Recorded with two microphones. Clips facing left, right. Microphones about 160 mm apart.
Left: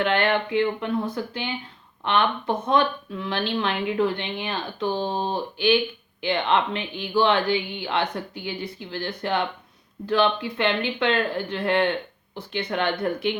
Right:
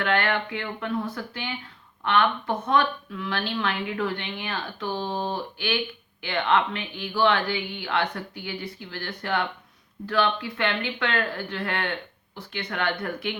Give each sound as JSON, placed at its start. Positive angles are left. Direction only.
{"t": 0.0, "sound": "speech", "side_deg": 20}